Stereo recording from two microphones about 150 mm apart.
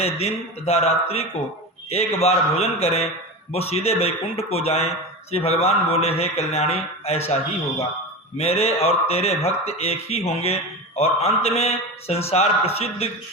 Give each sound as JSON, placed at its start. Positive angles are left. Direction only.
{"t": 0.0, "sound": "a man's voice", "side_deg": 45}
{"t": 8.4, "sound": "a man's voice", "side_deg": 45}